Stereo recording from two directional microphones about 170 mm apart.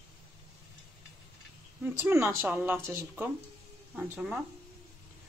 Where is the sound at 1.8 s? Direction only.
15° right (ahead or behind).